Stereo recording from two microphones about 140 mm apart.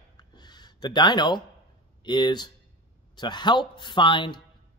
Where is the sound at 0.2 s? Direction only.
30° left (ahead or behind).